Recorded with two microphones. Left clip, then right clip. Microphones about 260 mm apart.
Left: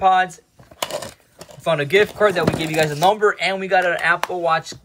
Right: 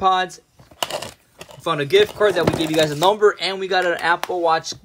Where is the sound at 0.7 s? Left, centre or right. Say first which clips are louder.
Right 1 dB; centre.